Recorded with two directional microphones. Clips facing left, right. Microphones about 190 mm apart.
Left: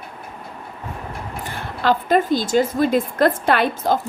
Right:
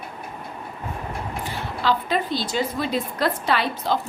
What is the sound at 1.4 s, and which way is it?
A woman's voice, 50° left (ahead or behind).